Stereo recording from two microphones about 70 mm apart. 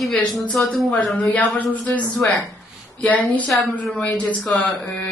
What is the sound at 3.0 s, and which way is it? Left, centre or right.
Speech, left.